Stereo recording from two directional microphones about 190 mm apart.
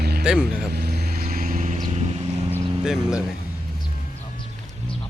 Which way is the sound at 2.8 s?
5° right (ahead or behind).